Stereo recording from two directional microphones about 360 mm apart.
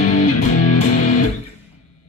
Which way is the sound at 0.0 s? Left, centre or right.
Centre.